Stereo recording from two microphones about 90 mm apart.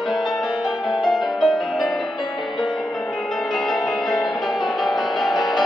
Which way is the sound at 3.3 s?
5° left (ahead or behind).